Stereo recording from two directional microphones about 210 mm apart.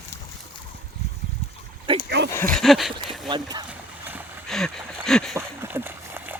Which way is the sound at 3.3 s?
20° right (ahead or behind).